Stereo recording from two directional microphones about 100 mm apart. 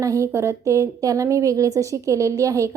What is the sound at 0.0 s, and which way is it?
A woman's voice, 30° right (ahead or behind).